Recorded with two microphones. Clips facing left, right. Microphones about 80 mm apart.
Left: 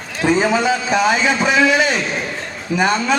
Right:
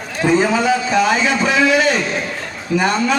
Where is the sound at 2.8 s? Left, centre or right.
Centre.